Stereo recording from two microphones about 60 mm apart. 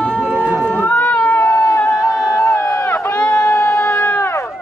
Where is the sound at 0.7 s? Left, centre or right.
Left.